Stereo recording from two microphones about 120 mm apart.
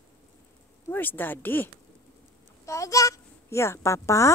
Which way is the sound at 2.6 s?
25° left (ahead or behind).